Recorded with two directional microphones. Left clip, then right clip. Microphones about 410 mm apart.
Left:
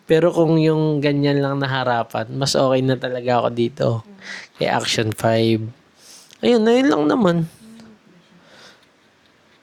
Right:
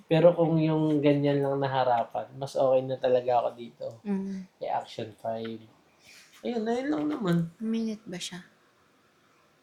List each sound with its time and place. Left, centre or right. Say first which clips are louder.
0.1 s speech: left 6 dB; left
3.0 s speech: even; left
3.2 s speech: left 8 dB; left